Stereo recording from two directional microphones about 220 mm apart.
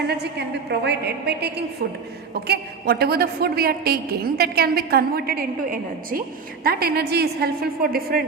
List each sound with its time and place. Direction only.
0.1 s a woman's voice: 50° right (ahead or behind)